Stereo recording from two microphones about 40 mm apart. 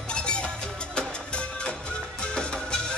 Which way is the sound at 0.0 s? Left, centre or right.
Left.